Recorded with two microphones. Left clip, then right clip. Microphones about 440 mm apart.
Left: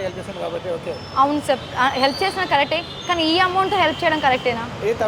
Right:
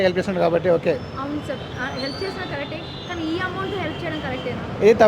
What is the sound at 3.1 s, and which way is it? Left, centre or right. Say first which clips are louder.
A woman's voice: left 9 dB; left.